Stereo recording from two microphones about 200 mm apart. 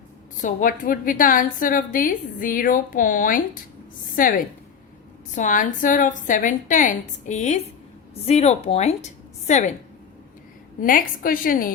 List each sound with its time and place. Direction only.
0.4 s a woman's voice: 45° left (ahead or behind)
10.8 s a woman's voice: 45° left (ahead or behind)